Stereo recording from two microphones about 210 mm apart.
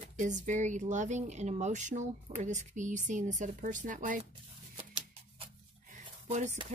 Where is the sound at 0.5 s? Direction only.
35° right (ahead or behind).